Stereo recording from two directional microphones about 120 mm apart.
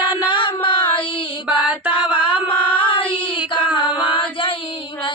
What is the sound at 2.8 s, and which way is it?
Child singing, 45° left (ahead or behind).